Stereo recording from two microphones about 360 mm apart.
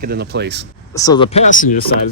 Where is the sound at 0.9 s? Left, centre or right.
Centre.